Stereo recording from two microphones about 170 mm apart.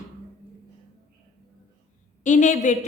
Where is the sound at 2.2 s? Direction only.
45° left (ahead or behind).